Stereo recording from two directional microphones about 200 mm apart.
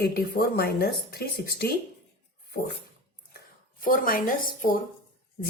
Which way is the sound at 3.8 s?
45° left (ahead or behind).